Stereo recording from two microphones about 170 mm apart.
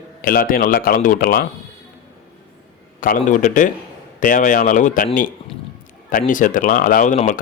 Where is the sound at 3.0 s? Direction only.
50° left (ahead or behind).